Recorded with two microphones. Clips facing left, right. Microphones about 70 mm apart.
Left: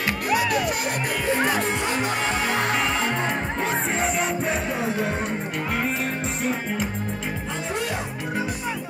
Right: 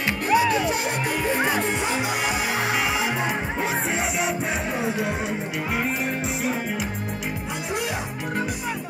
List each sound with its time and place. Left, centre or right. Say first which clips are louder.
0.3 s music: right 3 dB; right
4.8 s music: even; centre